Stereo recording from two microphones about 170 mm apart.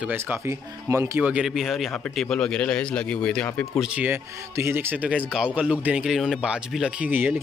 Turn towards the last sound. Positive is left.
turn(degrees=-10)  # may be behind; listen again after turning